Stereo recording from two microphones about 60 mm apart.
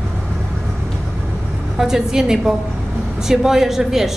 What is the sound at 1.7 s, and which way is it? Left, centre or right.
A man's voice, centre.